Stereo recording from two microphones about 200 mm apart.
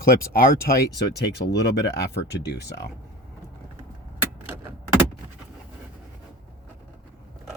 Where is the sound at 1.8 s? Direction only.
55° left (ahead or behind).